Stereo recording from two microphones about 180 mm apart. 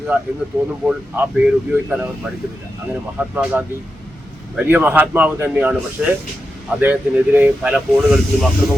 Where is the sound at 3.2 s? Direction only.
10° right (ahead or behind).